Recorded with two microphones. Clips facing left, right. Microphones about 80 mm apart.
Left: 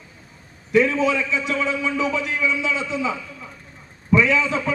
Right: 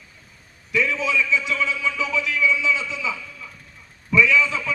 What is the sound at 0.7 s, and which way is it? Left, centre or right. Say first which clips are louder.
A man's voice: left 5 dB; left.